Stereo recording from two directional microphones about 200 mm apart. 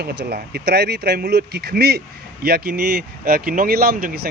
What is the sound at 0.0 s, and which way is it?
Speech, 55° right (ahead or behind).